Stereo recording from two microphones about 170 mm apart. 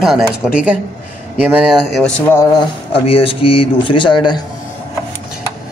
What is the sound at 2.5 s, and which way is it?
Speech, 30° left (ahead or behind).